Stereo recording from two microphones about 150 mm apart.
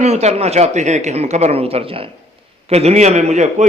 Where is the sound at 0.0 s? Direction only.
45° right (ahead or behind).